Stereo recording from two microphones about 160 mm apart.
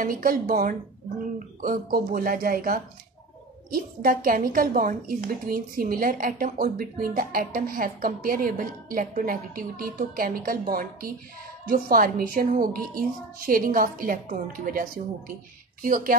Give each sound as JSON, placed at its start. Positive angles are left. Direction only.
{"t": 0.0, "sound": "a woman's voice", "side_deg": -60}